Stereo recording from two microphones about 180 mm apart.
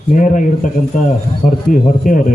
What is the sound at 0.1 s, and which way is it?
Speech, 45° left (ahead or behind).